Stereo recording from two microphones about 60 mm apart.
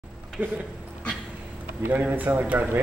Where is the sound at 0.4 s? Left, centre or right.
Right.